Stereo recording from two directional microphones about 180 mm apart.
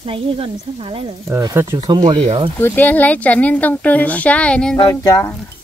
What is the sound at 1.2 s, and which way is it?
Speech, 15° right (ahead or behind).